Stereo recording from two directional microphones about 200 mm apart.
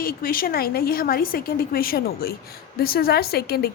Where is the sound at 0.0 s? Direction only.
45° left (ahead or behind).